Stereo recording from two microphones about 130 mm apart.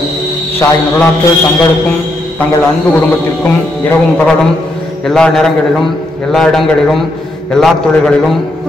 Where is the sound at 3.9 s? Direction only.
10° left (ahead or behind).